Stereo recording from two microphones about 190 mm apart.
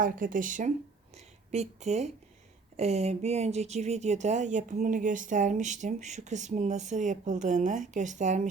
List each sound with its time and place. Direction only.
0.0 s a woman's voice: 45° right (ahead or behind)